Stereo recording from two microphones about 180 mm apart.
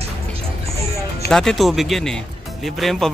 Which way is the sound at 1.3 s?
5° left (ahead or behind).